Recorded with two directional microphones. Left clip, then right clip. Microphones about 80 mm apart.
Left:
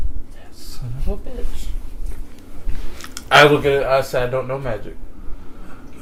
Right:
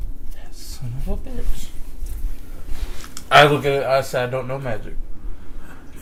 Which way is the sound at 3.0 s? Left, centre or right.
Left.